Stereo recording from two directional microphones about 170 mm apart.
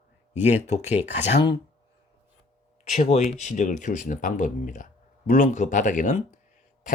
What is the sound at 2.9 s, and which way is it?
Speech, 45° left (ahead or behind).